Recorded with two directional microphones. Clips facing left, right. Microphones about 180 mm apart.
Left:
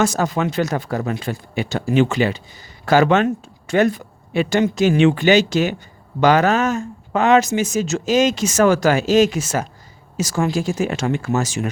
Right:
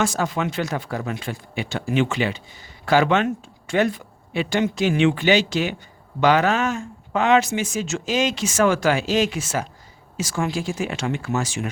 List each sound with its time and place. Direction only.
0.0 s speech: 40° left (ahead or behind)